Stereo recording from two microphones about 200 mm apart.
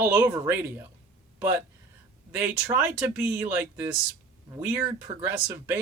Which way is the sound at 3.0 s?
5° right (ahead or behind).